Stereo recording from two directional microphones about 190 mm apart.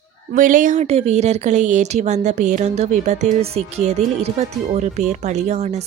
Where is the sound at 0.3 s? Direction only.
45° right (ahead or behind).